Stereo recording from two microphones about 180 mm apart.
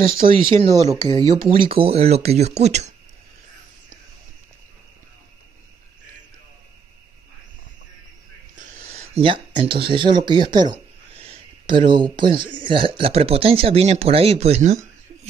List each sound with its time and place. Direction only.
0.3 s speech: 30° right (ahead or behind)
8.5 s speech: 35° right (ahead or behind)